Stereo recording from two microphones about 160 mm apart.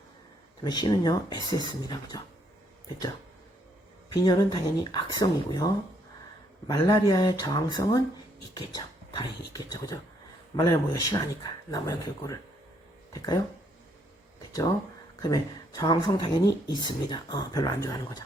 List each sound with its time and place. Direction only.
0.6 s speech: 25° left (ahead or behind)
4.1 s speech: 25° left (ahead or behind)
6.7 s speech: 20° left (ahead or behind)
15.2 s speech: 20° left (ahead or behind)